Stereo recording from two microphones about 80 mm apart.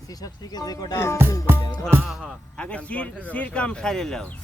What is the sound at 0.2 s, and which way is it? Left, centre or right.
Speech, left.